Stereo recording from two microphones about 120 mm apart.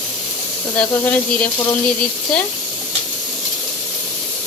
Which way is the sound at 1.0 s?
10° left (ahead or behind).